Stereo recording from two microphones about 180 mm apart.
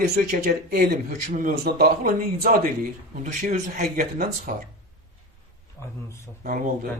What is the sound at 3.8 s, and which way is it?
Speech, 55° right (ahead or behind).